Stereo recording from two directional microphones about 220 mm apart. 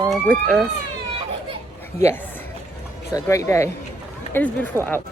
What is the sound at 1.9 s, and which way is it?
Speech, 15° left (ahead or behind).